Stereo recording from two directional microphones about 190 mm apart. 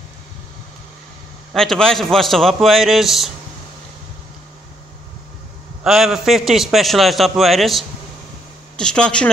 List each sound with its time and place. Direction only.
1.5 s a man's voice: centre (ahead or behind)
5.9 s a man's voice: centre (ahead or behind)